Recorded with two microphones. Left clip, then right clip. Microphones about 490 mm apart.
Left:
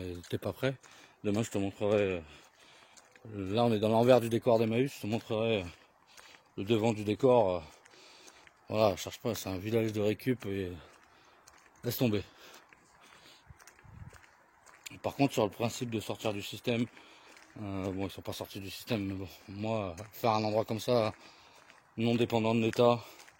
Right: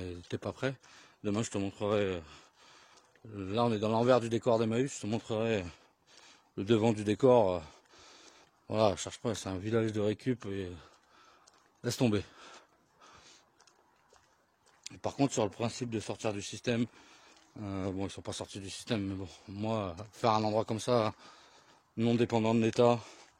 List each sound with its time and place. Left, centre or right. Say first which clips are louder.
0.0 s speech: left 2 dB; right
11.8 s a sound: right 1 dB; right
15.0 s speech: left 1 dB; right